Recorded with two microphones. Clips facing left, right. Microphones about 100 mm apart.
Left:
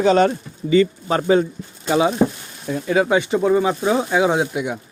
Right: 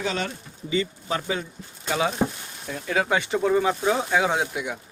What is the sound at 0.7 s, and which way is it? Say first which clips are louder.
Speech: left 11 dB; 60° left (ahead or behind).